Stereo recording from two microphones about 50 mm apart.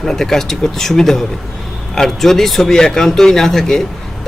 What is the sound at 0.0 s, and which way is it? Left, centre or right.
Speech, centre.